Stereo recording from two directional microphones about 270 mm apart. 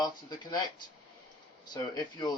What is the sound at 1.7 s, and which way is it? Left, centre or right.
Speech, centre.